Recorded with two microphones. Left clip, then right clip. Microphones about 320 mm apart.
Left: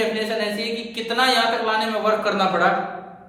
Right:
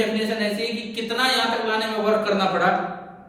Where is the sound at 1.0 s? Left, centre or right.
Centre.